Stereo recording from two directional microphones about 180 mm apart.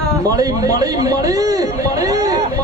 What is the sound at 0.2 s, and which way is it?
A man's voice, 20° right (ahead or behind).